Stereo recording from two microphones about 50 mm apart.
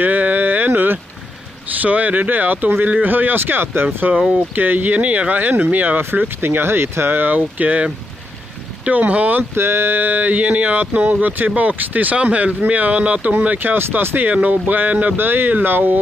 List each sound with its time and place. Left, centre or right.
0.0 s a sound: right
1.8 s speech: right
4.0 s speech: right
6.0 s speech: right
7.3 s speech: right
9.6 s speech: right
14.1 s speech: right